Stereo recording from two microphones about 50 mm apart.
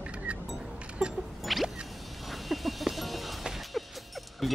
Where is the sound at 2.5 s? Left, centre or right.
Centre.